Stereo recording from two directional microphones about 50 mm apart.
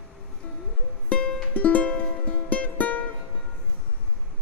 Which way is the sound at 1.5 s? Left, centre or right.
Left.